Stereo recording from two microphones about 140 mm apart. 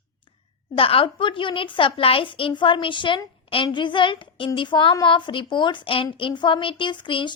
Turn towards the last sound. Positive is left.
turn(degrees=35)  # may be behind; listen again after turning